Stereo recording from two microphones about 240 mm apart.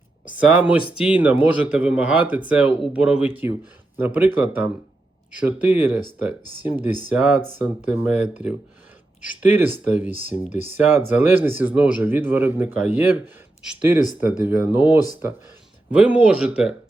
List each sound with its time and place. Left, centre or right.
0.6 s a man's voice: centre
16.0 s speech: centre